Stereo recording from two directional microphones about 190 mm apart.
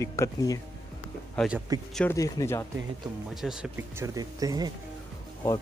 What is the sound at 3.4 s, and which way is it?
Speech, 5° right (ahead or behind).